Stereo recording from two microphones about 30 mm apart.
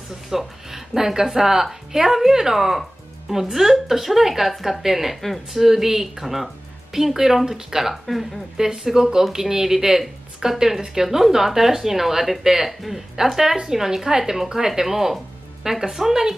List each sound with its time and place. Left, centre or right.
0.3 s a woman's voice: centre
5.6 s a woman's voice: centre
7.9 s speech: centre
8.5 s a woman's voice: centre